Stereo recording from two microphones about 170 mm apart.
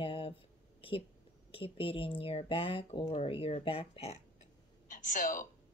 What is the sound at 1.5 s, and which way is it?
Speech, 30° left (ahead or behind).